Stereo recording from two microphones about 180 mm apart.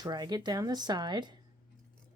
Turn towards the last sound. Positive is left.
turn(degrees=-25)  # may be behind; listen again after turning